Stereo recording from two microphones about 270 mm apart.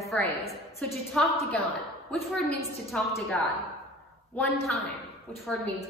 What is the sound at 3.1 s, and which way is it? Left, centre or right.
Speech, centre.